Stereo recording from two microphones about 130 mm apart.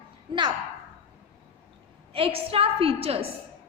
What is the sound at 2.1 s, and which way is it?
A woman's voice, 45° right (ahead or behind).